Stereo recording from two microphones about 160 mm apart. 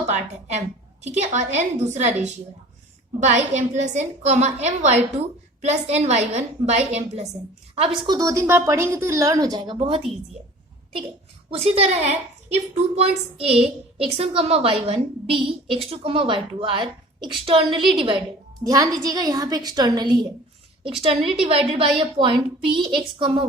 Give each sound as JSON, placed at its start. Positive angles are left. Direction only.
{"t": 0.1, "sound": "a woman's voice", "side_deg": -45}
{"t": 3.2, "sound": "a woman's voice", "side_deg": -45}
{"t": 7.8, "sound": "a woman's voice", "side_deg": -25}
{"t": 11.5, "sound": "a woman's voice", "side_deg": -40}
{"t": 18.6, "sound": "a woman's voice", "side_deg": -20}
{"t": 21.0, "sound": "a woman's voice", "side_deg": -35}